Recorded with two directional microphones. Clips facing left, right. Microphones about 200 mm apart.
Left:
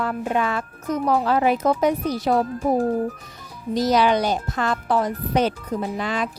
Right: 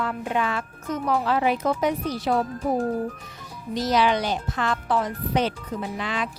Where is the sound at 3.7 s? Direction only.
40° left (ahead or behind).